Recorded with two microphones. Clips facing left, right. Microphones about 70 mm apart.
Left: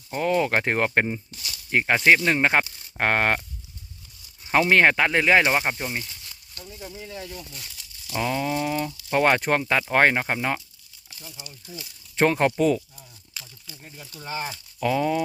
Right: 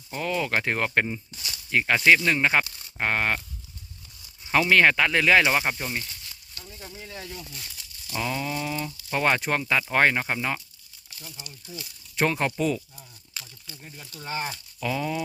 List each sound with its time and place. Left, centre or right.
0.1 s speech: left
4.4 s speech: left
5.5 s speech: centre
6.5 s speech: centre
7.3 s crumpling: centre
8.1 s speech: left
11.3 s speech: centre
12.1 s speech: left
13.8 s speech: centre
14.8 s speech: left